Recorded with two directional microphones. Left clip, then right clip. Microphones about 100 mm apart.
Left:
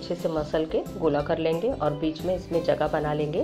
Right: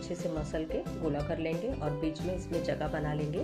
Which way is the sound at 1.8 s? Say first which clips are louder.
Left 8 dB; 15° left (ahead or behind).